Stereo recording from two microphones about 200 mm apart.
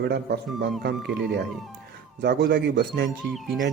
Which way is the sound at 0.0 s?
55° right (ahead or behind).